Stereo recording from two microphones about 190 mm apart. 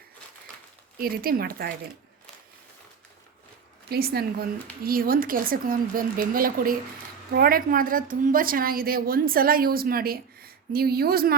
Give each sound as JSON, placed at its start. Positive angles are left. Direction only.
{"t": 0.9, "sound": "a woman's voice", "side_deg": -50}
{"t": 3.8, "sound": "a woman's voice", "side_deg": -55}